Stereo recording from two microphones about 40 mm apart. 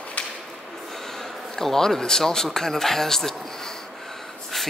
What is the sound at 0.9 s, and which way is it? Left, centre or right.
A man's voice, centre.